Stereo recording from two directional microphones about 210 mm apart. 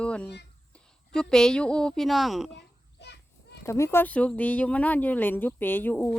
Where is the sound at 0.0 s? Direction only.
5° left (ahead or behind).